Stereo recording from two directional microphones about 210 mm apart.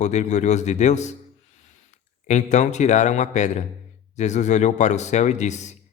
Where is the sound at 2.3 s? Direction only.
35° left (ahead or behind).